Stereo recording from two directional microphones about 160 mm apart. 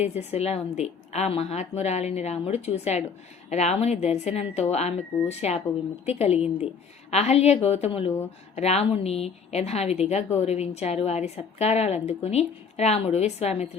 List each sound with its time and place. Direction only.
0.0 s a woman's voice: 45° left (ahead or behind)